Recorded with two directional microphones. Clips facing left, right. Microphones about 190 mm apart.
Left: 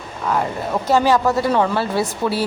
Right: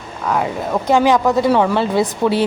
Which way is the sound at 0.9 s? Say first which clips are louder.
Right 2 dB; 15° right (ahead or behind).